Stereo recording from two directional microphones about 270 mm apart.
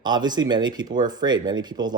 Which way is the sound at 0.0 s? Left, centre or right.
Centre.